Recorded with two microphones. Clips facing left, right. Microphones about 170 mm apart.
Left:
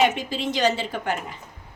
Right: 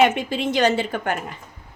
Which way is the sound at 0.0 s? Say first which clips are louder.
Right 3 dB; 60° right (ahead or behind).